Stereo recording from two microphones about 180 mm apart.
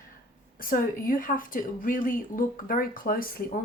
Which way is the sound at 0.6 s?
50° left (ahead or behind).